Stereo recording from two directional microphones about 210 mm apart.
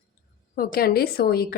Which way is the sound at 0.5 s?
45° left (ahead or behind).